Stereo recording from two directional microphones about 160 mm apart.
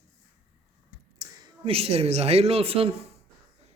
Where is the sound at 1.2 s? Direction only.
35° right (ahead or behind).